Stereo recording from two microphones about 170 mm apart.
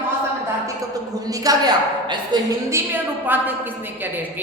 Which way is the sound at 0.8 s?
20° right (ahead or behind).